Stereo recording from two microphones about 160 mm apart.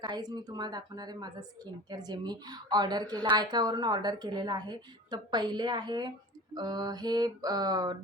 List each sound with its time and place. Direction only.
0.0 s a woman's voice: 25° right (ahead or behind)